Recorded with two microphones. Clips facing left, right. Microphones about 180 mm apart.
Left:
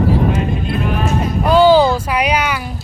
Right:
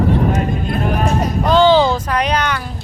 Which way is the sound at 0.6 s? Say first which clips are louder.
Right 1 dB; 40° right (ahead or behind).